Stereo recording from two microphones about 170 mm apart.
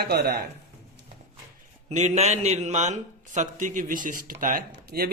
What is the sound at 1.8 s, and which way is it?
A man's voice, 45° right (ahead or behind).